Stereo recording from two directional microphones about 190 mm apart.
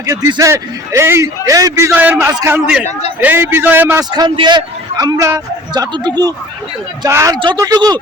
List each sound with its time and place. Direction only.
0.0 s a man's voice: 20° right (ahead or behind)
4.1 s a man's voice: 20° right (ahead or behind)